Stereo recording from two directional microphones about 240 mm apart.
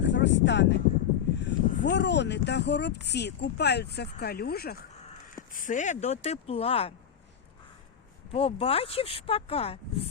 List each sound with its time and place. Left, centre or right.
0.0 s speech: left
8.3 s speech: left